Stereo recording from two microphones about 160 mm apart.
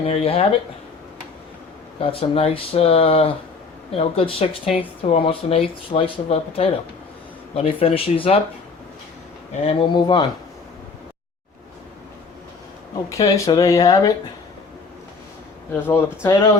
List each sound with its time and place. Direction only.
0.0 s speech: 40° left (ahead or behind)
2.0 s speech: 35° left (ahead or behind)
9.6 s speech: 30° left (ahead or behind)
13.1 s speech: 20° left (ahead or behind)
15.7 s speech: 15° left (ahead or behind)